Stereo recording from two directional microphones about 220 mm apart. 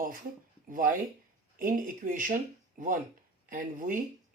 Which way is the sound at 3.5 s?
40° right (ahead or behind).